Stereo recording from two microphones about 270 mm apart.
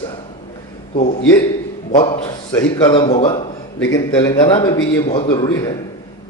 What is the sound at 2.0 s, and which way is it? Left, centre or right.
A man's voice, centre.